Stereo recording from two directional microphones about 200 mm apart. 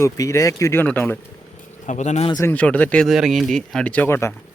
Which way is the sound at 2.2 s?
20° left (ahead or behind).